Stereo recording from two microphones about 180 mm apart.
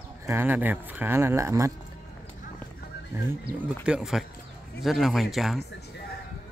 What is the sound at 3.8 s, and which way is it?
Speech, 5° right (ahead or behind).